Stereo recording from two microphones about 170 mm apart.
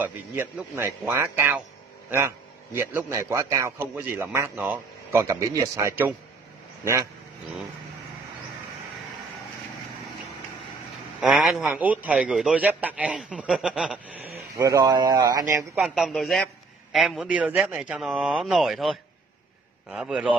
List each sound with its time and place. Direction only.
0.0 s a man's voice: 10° right (ahead or behind)
5.2 s a man's voice: 20° right (ahead or behind)
11.1 s a man's voice: 5° right (ahead or behind)
14.6 s speech: 20° right (ahead or behind)
15.7 s a man's voice: centre (ahead or behind)